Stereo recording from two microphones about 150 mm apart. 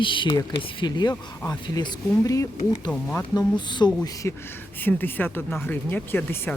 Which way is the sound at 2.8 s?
5° left (ahead or behind).